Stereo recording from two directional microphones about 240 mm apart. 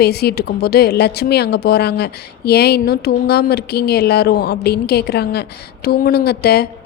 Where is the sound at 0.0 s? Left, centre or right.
Left.